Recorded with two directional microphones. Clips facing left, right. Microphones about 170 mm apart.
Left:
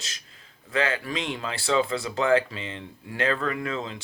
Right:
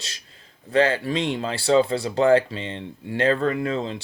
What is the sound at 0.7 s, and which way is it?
Speech, 30° right (ahead or behind).